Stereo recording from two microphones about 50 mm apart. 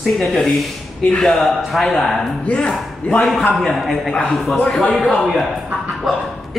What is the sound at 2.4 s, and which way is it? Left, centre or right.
Speech, left.